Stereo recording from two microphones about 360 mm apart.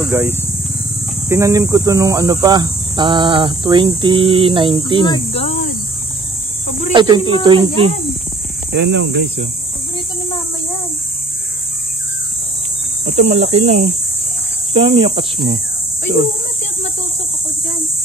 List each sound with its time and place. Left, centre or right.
0.1 s cricket: centre
5.0 s speech: centre
6.9 s speech: centre
7.4 s cricket: centre
8.7 s speech: right
13.0 s cricket: centre